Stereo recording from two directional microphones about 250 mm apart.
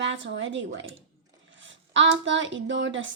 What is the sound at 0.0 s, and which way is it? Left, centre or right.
Speech, right.